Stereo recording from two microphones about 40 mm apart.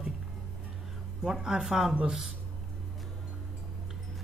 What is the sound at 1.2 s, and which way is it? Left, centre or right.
Speech, centre.